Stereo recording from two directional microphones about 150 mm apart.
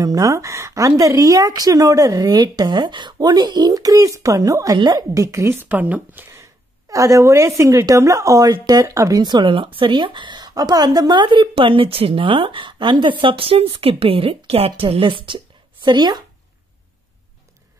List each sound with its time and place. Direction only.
0.0 s a woman's voice: 25° right (ahead or behind)